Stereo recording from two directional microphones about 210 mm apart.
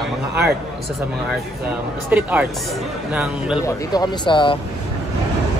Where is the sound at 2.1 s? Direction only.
5° right (ahead or behind).